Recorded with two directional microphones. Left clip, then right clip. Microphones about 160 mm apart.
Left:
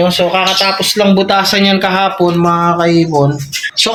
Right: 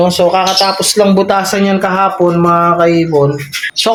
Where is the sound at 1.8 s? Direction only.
5° right (ahead or behind).